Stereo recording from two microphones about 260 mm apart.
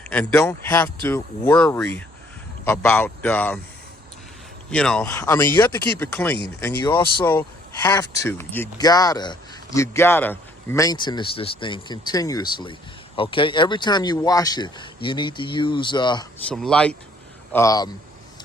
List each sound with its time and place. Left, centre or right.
0.1 s speech: centre
4.7 s speech: centre
6.9 s speech: centre
16.4 s speech: centre